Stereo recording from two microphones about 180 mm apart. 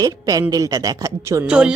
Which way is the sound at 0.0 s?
20° right (ahead or behind).